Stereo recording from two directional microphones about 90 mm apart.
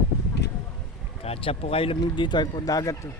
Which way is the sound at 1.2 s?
90° left.